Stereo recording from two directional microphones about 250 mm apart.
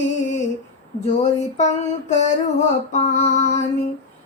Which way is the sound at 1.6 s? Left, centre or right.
Left.